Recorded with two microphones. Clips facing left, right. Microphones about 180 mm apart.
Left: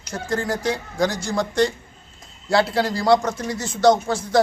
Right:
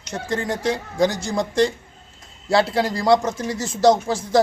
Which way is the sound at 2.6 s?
25° right (ahead or behind).